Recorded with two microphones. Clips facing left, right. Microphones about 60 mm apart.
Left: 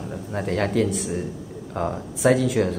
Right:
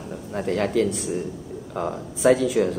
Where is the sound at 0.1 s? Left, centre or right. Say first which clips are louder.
Right 1 dB; centre.